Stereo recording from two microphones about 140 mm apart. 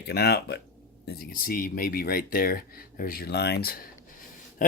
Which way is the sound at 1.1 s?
90° left.